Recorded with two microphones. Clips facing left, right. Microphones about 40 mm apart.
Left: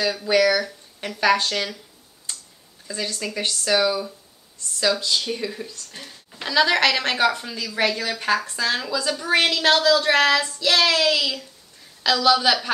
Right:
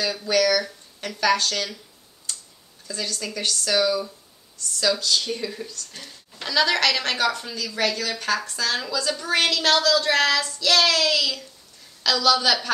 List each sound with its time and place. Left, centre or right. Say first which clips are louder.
0.0 s speech: left 3 dB; centre
2.3 s tick-tock: even; centre
2.9 s a woman's voice: left 2 dB; left